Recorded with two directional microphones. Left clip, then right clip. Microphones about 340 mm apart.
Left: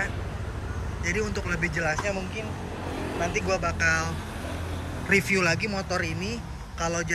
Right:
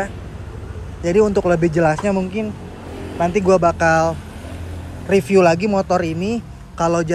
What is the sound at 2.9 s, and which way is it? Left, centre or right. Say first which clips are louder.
Vehicle: right 2 dB; left.